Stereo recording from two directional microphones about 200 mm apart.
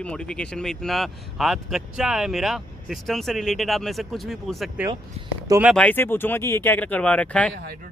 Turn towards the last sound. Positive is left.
turn(degrees=5)  # may be behind; listen again after turning